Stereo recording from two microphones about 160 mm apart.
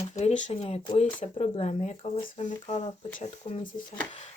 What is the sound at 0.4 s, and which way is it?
Speech, 35° left (ahead or behind).